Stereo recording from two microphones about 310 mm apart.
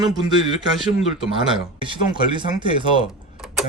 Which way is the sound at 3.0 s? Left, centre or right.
Centre.